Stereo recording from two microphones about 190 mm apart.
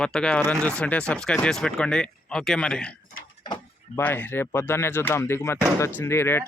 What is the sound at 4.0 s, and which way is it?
Speech, 10° left (ahead or behind).